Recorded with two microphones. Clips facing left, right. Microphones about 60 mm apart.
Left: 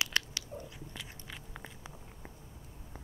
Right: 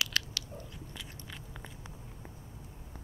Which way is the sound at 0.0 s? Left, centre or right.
Left.